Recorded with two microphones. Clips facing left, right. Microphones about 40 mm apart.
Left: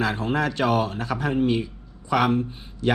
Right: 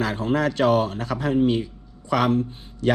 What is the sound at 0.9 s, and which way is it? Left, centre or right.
Speech, left.